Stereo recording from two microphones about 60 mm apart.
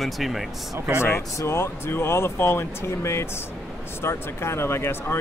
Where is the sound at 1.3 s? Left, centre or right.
Left.